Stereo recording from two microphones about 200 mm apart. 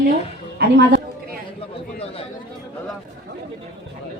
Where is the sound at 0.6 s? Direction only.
60° right (ahead or behind).